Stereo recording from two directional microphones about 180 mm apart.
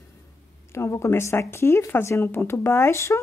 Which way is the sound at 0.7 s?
15° left (ahead or behind).